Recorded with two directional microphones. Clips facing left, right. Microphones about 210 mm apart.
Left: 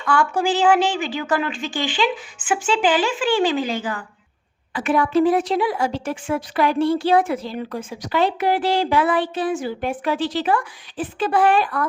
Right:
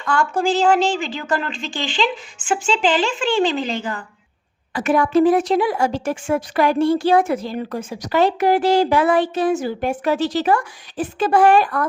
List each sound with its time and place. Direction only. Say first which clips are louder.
0.0 s a woman's voice: even; 5° left (ahead or behind)
4.7 s speech: right 2 dB; 45° right (ahead or behind)